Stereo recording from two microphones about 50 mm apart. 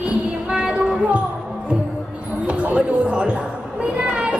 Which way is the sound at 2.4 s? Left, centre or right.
Right.